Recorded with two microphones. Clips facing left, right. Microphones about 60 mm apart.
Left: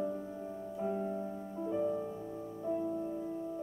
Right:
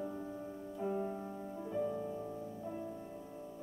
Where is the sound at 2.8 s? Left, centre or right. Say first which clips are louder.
Left 9 dB; centre.